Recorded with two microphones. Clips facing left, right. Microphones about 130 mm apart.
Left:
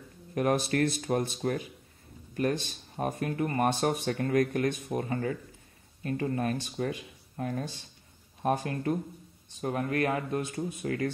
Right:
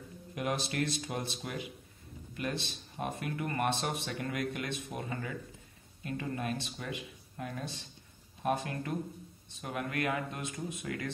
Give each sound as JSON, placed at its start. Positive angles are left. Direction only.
{"t": 0.3, "sound": "speech", "side_deg": 50}